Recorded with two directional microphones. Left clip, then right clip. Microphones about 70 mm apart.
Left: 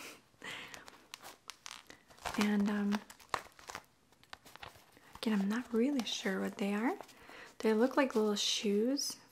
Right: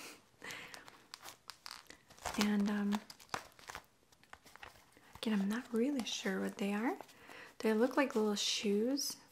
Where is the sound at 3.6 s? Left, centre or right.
Centre.